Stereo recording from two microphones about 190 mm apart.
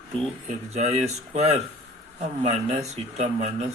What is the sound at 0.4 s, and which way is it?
Speech, 35° right (ahead or behind).